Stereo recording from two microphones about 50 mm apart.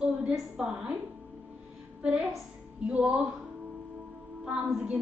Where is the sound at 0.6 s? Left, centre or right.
Centre.